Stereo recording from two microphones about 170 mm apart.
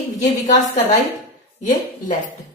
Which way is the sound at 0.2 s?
45° left (ahead or behind).